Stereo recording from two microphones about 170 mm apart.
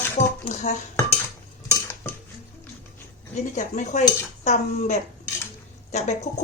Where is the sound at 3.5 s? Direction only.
45° left (ahead or behind).